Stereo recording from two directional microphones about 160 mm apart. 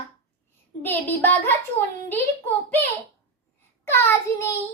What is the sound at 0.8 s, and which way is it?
Speech, 10° left (ahead or behind).